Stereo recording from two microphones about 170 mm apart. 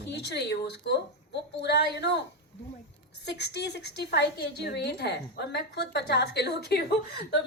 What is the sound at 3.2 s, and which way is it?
A woman's voice, 75° left (ahead or behind).